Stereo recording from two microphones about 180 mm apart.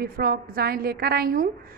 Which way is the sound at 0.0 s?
55° right (ahead or behind).